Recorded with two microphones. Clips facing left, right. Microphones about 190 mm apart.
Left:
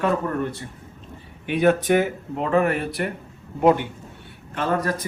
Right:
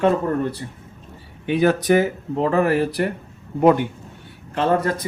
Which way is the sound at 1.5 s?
35° right (ahead or behind).